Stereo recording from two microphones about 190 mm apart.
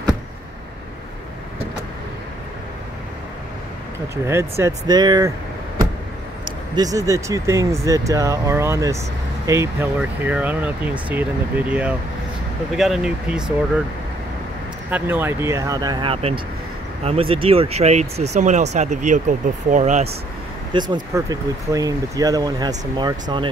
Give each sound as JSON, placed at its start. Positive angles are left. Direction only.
{"t": 4.3, "sound": "speech", "side_deg": -15}
{"t": 6.7, "sound": "speech", "side_deg": -20}
{"t": 14.9, "sound": "speech", "side_deg": -10}
{"t": 20.7, "sound": "speech", "side_deg": -25}